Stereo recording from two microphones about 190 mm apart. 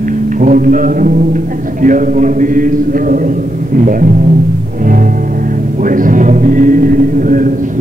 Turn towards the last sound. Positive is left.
turn(degrees=-45)  # may be behind; listen again after turning